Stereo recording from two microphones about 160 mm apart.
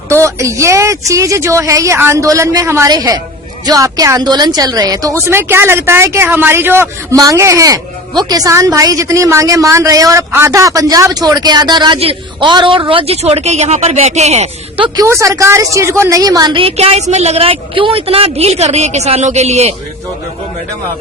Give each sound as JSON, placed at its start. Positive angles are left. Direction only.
{"t": 0.1, "sound": "a woman's voice", "side_deg": -20}
{"t": 14.9, "sound": "a woman's voice", "side_deg": -20}